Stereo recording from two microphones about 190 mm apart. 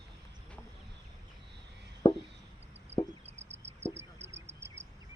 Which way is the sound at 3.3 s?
35° right (ahead or behind).